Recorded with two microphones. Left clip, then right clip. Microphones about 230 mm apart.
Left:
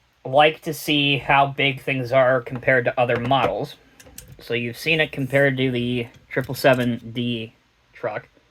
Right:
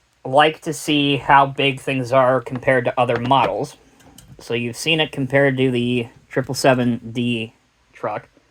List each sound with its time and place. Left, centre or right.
0.6 s speech: right